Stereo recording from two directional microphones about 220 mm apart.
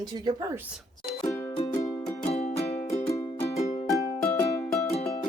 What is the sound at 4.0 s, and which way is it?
Music, 15° left (ahead or behind).